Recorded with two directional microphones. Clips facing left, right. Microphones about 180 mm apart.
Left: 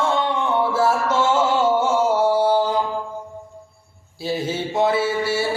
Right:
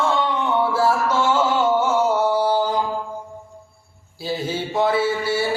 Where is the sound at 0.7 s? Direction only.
25° left (ahead or behind).